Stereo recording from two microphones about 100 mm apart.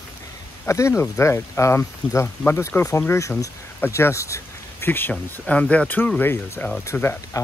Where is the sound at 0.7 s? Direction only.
30° left (ahead or behind).